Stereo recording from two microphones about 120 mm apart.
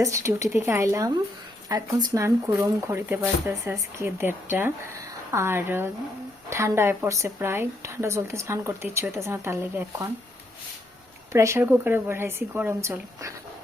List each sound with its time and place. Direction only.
0.0 s speech: 25° right (ahead or behind)
11.3 s speech: 25° right (ahead or behind)